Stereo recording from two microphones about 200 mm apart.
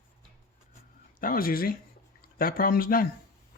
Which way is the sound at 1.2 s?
45° left (ahead or behind).